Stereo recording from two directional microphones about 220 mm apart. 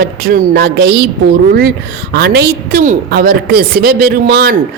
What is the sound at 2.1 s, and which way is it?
Speech, 50° right (ahead or behind).